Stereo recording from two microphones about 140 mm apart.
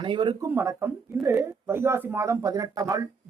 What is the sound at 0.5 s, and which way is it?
A man's voice, 20° right (ahead or behind).